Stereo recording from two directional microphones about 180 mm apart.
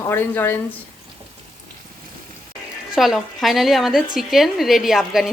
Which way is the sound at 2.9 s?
Centre (ahead or behind).